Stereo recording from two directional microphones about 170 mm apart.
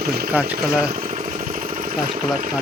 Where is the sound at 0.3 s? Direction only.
10° right (ahead or behind).